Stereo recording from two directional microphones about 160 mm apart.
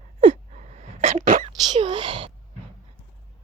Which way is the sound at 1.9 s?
30° right (ahead or behind).